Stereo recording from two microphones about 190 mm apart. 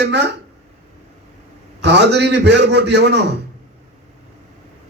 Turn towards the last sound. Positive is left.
turn(degrees=-60)  # may be behind; listen again after turning